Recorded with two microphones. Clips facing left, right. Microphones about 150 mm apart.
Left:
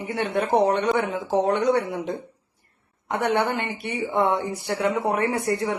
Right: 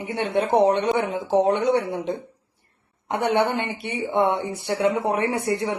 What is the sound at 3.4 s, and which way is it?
A woman's voice, 30° right (ahead or behind).